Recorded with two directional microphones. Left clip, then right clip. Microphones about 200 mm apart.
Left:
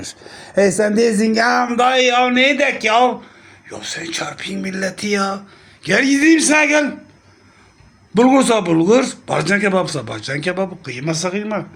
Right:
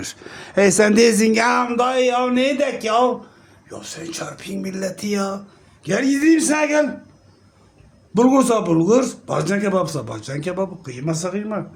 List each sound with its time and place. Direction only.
0.0 s speech: 5° right (ahead or behind)
8.1 s speech: 5° right (ahead or behind)